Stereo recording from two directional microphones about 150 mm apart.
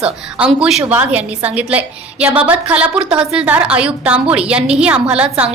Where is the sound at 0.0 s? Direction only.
10° right (ahead or behind).